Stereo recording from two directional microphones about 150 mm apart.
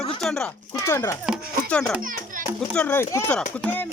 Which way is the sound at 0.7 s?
20° left (ahead or behind).